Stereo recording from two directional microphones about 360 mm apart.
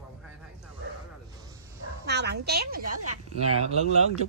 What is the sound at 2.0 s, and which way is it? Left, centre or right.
Speech, right.